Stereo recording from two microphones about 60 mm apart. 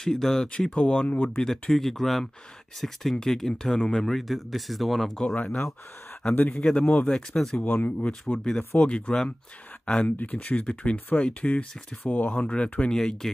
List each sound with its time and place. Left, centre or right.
0.0 s speech: centre
1.1 s speech: left
1.4 s speech: centre
5.2 s speech: centre
6.3 s a man's voice: left
7.1 s speech: centre
7.5 s speech: left
8.5 s speech: centre
12.1 s speech: left
12.9 s speech: centre